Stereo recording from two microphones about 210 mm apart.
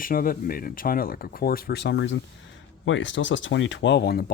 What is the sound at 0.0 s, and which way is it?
Speech, 40° left (ahead or behind).